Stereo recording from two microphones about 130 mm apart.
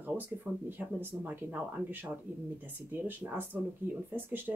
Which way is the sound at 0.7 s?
15° right (ahead or behind).